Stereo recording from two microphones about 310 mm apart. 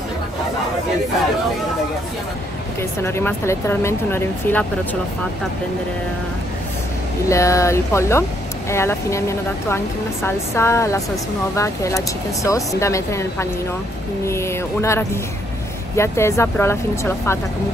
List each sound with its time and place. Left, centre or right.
2.8 s speech: centre
7.2 s speech: centre